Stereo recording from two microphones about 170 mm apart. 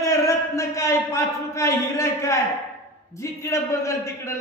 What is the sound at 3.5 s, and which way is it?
Speech, 15° left (ahead or behind).